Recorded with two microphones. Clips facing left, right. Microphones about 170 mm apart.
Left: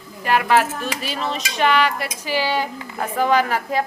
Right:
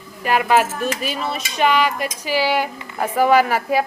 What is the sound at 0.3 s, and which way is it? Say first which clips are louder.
Speech: right 1 dB; 15° right (ahead or behind).